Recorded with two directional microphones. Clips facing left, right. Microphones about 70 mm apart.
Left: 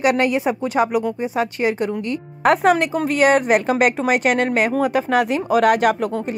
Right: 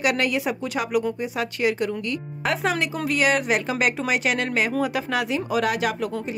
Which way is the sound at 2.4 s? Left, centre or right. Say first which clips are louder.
Left 9 dB; left.